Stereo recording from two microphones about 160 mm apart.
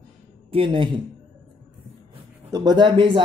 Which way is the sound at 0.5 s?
30° right (ahead or behind).